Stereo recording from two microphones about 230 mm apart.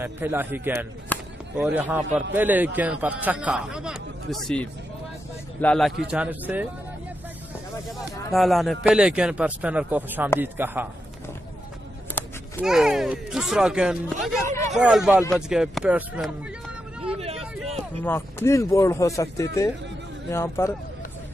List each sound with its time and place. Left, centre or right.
0.0 s a man's voice: centre
1.1 s a sound: centre
1.6 s a man's voice: centre
8.3 s a man's voice: centre
12.2 s a sound: centre
12.6 s a man's voice: centre
17.6 s speech: centre